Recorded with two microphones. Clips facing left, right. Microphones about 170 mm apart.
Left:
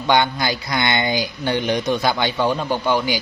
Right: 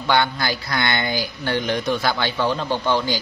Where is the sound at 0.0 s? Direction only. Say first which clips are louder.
Left 2 dB; 20° left (ahead or behind).